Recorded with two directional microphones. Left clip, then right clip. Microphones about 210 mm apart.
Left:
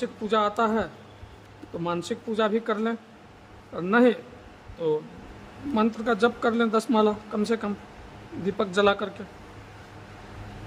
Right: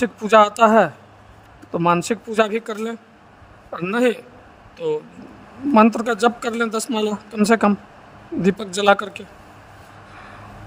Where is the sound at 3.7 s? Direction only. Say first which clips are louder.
Right 2 dB; 45° right (ahead or behind).